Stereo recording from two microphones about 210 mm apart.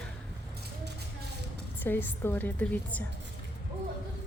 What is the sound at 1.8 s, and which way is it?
A woman's voice, 10° left (ahead or behind).